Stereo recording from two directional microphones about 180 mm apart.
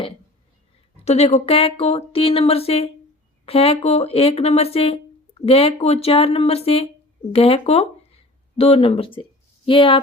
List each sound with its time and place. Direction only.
1.0 s speech: 35° left (ahead or behind)